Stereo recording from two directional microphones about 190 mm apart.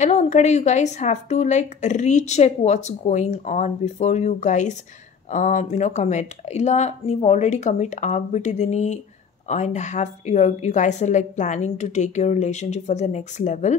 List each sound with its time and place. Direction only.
0.0 s a woman's voice: 35° left (ahead or behind)